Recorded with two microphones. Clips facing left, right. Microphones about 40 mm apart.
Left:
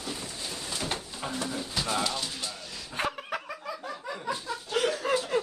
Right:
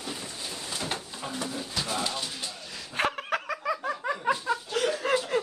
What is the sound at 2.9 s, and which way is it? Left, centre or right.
Snicker, right.